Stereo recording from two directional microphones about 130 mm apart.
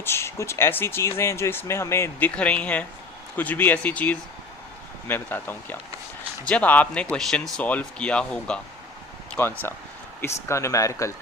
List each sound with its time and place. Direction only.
0.0 s speech: 20° left (ahead or behind)